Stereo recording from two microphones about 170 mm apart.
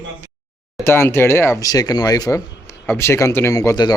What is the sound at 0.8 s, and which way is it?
Speech, 15° left (ahead or behind).